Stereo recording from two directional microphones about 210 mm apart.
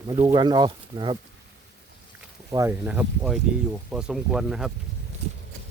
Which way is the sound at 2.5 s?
10° right (ahead or behind).